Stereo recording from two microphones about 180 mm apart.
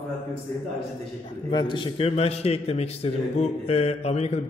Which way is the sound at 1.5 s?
25° left (ahead or behind).